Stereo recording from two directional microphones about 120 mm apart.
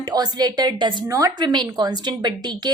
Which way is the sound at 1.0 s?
25° right (ahead or behind).